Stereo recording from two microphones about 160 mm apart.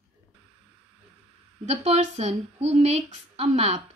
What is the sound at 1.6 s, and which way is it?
Speech, 40° right (ahead or behind).